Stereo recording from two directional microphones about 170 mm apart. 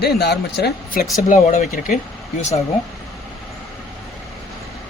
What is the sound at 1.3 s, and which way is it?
Speech, 50° left (ahead or behind).